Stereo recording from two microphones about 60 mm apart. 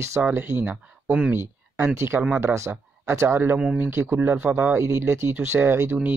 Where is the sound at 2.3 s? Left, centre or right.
Right.